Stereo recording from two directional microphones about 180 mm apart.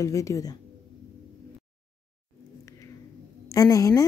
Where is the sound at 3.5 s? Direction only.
20° left (ahead or behind).